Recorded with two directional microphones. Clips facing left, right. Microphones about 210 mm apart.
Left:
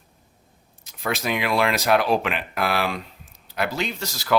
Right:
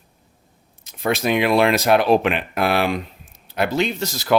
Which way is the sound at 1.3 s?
25° right (ahead or behind).